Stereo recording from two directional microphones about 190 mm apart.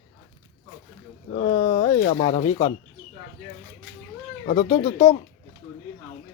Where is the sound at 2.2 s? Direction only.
30° left (ahead or behind).